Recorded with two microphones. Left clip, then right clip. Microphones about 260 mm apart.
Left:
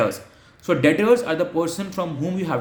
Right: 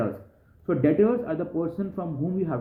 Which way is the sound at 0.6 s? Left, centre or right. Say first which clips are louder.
Left 5 dB; centre.